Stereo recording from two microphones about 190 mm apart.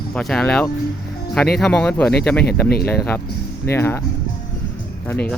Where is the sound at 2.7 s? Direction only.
55° left (ahead or behind).